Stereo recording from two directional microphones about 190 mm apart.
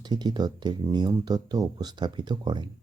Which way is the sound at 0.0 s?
20° right (ahead or behind).